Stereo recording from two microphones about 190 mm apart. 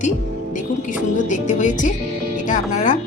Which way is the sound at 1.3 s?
40° left (ahead or behind).